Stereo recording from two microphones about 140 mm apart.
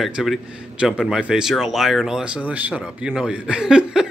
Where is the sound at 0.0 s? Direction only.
Centre (ahead or behind).